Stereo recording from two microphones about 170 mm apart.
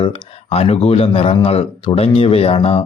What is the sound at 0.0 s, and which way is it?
Speech, 35° left (ahead or behind).